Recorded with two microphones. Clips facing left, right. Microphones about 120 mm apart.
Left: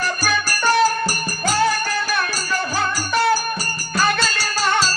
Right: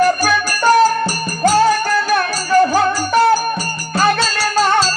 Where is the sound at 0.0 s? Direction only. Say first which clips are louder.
Right 8 dB; 45° right (ahead or behind).